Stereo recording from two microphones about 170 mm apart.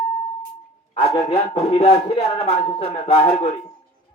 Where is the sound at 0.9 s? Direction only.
30° left (ahead or behind).